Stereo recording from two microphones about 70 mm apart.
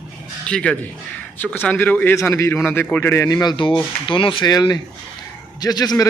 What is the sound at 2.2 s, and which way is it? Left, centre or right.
Speech, left.